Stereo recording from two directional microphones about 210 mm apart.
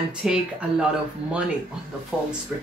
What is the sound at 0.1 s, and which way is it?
Speech, 5° right (ahead or behind).